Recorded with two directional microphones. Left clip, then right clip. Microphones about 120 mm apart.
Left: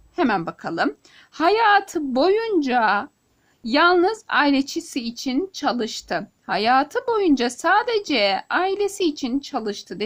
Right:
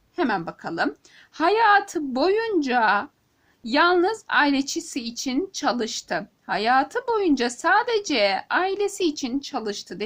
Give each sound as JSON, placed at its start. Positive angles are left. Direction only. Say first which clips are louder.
{"t": 0.2, "sound": "a woman's voice", "louder": "left 3 dB", "side_deg": 50}